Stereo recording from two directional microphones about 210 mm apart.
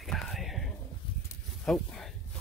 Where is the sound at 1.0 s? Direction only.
20° left (ahead or behind).